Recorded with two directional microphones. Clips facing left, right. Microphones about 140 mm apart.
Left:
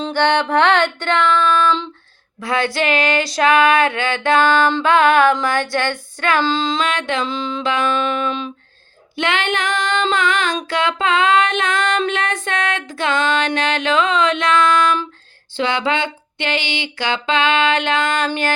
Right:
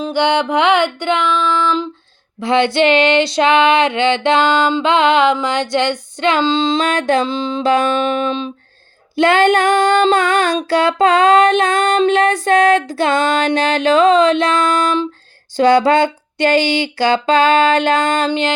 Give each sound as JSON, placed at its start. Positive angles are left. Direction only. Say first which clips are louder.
{"t": 0.0, "sound": "music", "louder": "right 2 dB", "side_deg": -15}
{"t": 2.4, "sound": "female singing", "louder": "right 6 dB", "side_deg": -25}
{"t": 6.7, "sound": "female singing", "louder": "right 5 dB", "side_deg": -35}
{"t": 18.3, "sound": "female singing", "louder": "right 4 dB", "side_deg": -20}